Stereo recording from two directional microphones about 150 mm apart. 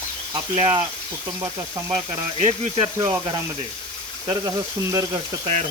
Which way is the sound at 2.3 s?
50° right (ahead or behind).